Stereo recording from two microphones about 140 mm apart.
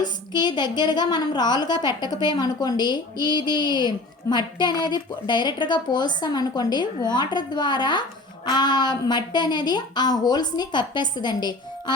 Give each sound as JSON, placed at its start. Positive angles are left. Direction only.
{"t": 0.0, "sound": "a woman's voice", "side_deg": 30}